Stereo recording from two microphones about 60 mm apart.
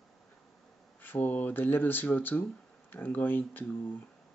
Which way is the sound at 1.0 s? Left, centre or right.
Left.